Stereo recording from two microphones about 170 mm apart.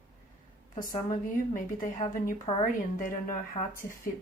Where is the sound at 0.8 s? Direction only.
50° left (ahead or behind).